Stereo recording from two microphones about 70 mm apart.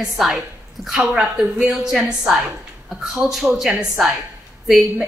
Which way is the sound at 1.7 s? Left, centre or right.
Centre.